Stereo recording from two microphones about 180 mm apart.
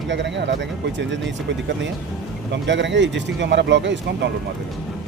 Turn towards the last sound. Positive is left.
turn(degrees=-80)